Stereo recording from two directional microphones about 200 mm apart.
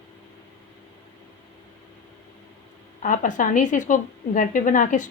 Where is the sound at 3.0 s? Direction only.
40° left (ahead or behind).